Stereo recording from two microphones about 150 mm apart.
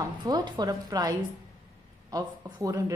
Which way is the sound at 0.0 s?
25° right (ahead or behind).